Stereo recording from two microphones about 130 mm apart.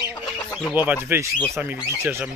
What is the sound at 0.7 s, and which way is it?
Speech, 15° right (ahead or behind).